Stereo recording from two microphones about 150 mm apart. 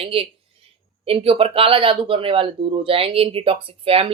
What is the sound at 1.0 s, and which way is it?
Speech, 40° right (ahead or behind).